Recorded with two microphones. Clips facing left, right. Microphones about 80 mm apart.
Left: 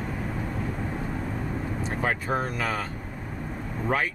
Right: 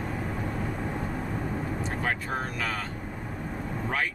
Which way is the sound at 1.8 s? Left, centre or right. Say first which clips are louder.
Left 2 dB; centre.